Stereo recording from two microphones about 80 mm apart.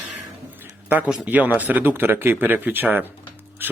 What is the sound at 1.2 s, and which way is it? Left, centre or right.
Speech, centre.